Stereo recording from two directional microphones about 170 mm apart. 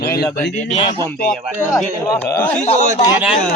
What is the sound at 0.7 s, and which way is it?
Speech, 30° left (ahead or behind).